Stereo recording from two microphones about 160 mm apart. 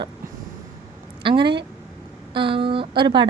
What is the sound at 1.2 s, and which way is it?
Speech, 30° right (ahead or behind).